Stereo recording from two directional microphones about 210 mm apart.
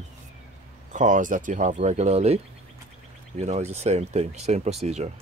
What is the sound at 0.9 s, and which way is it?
Speech, 40° right (ahead or behind).